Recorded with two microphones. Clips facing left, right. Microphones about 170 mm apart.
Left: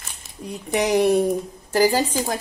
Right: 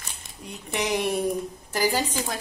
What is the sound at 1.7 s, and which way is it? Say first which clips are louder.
Speech: left 6 dB; 40° left (ahead or behind).